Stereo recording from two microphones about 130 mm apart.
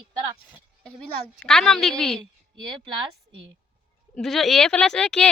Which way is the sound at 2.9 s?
40° right (ahead or behind).